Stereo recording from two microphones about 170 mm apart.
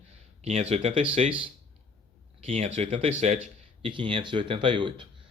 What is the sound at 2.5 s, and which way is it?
Speech, 40° right (ahead or behind).